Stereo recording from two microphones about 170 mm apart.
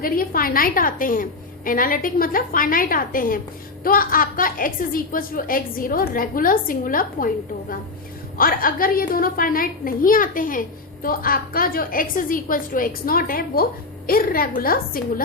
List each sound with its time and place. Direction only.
0.0 s a child's voice: 60° left (ahead or behind)